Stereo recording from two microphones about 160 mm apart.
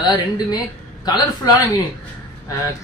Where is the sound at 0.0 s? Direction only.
25° left (ahead or behind).